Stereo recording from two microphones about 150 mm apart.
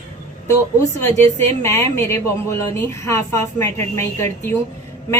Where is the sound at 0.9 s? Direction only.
15° left (ahead or behind).